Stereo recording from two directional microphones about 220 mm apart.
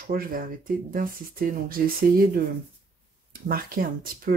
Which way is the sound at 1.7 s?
40° right (ahead or behind).